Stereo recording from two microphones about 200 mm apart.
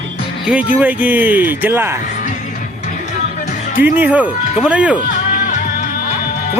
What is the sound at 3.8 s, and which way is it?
Speech, 10° right (ahead or behind).